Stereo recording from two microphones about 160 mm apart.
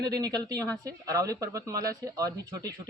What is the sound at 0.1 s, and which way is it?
Speech, 25° right (ahead or behind).